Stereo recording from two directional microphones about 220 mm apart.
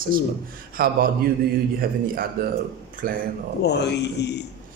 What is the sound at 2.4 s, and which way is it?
Speech, 45° right (ahead or behind).